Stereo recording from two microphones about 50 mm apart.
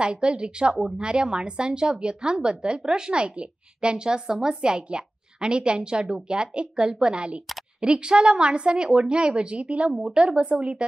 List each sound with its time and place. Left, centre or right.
0.0 s a woman's voice: centre